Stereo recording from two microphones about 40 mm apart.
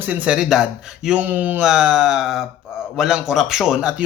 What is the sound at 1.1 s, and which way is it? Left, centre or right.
Speech, right.